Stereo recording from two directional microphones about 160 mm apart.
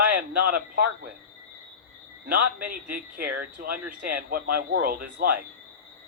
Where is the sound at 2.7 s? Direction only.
65° right (ahead or behind).